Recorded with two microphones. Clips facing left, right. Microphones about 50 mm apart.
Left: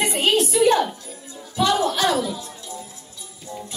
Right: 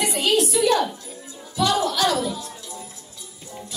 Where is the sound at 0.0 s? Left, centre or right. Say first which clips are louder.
Left 1 dB; left.